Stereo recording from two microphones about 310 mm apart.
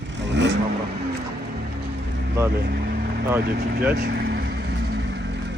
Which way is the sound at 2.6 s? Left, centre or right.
Right.